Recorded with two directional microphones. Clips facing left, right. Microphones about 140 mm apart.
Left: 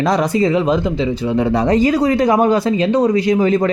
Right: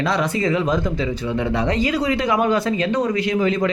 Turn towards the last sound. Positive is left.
turn(degrees=40)  # may be behind; listen again after turning